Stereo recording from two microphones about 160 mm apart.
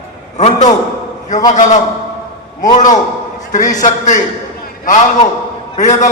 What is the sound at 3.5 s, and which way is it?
Speech, 55° left (ahead or behind).